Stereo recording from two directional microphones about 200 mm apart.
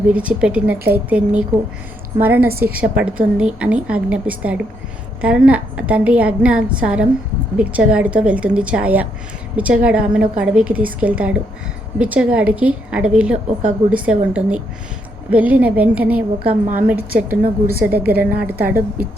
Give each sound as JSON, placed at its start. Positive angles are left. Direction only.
{"t": 0.1, "sound": "a woman's voice", "side_deg": -5}
{"t": 17.2, "sound": "a woman's voice", "side_deg": -45}